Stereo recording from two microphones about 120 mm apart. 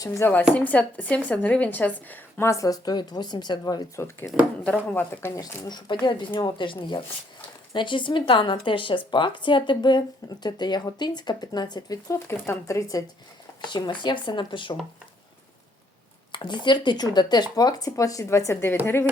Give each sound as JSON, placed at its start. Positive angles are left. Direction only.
{"t": 0.0, "sound": "speech", "side_deg": 25}
{"t": 0.5, "sound": "a woman's voice", "side_deg": 10}
{"t": 2.5, "sound": "a woman's voice", "side_deg": 30}
{"t": 5.4, "sound": "a woman's voice", "side_deg": 35}
{"t": 13.6, "sound": "speech", "side_deg": 40}
{"t": 16.3, "sound": "speech", "side_deg": 40}